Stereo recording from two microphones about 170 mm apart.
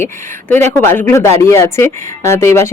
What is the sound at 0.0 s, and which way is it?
Speech, 10° left (ahead or behind).